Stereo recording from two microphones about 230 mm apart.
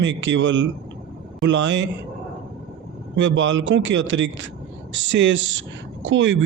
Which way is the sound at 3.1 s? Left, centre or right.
Right.